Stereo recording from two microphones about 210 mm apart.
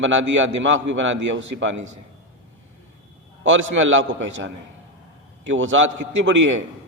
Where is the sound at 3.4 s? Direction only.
65° right (ahead or behind).